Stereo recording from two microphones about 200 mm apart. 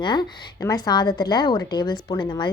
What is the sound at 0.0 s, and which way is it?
A woman's voice, 20° left (ahead or behind).